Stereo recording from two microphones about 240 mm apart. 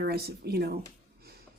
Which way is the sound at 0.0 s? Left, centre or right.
Right.